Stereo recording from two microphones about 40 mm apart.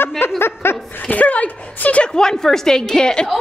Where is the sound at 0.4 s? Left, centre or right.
Left.